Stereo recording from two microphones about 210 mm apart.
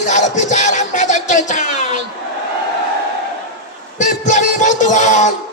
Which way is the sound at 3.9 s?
35° left (ahead or behind).